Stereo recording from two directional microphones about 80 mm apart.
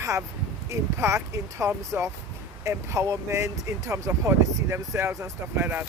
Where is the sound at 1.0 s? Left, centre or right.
Right.